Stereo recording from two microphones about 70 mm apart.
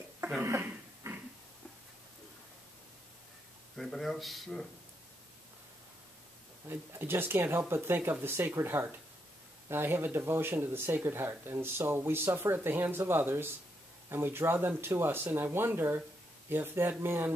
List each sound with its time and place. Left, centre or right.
0.2 s a sound: right
3.7 s speech: centre
6.7 s speech: right